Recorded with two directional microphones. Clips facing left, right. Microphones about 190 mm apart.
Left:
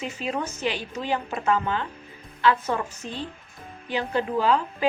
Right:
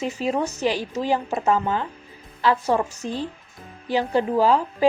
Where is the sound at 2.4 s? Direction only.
35° right (ahead or behind).